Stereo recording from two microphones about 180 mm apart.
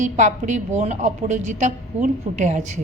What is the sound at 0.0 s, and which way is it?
A woman's voice, 40° right (ahead or behind).